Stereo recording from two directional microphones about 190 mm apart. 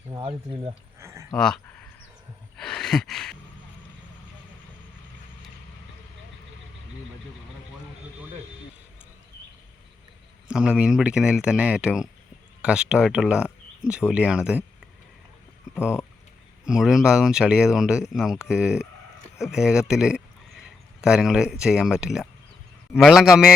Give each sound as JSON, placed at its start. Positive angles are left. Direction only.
{"t": 0.2, "sound": "speech", "side_deg": -30}
{"t": 0.9, "sound": "a sound", "side_deg": -15}
{"t": 1.3, "sound": "speech", "side_deg": 5}
{"t": 2.6, "sound": "a sound", "side_deg": 5}
{"t": 10.5, "sound": "speech", "side_deg": -5}
{"t": 15.7, "sound": "speech", "side_deg": -5}